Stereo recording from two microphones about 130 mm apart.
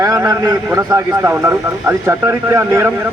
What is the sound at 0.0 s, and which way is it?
A man's voice, 25° right (ahead or behind).